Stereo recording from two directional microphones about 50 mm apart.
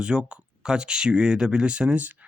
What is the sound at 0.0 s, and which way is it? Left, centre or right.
Speech, centre.